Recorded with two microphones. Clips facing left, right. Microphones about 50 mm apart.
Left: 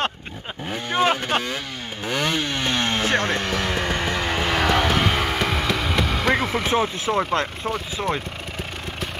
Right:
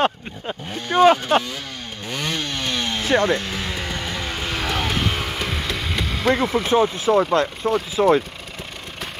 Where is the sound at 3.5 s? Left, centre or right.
Left.